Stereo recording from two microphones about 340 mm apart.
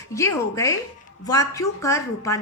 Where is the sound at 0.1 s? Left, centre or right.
Centre.